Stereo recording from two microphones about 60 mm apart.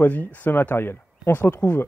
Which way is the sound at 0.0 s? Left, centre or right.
Left.